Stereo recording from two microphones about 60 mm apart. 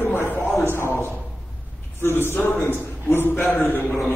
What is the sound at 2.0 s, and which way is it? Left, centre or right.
A man's voice, left.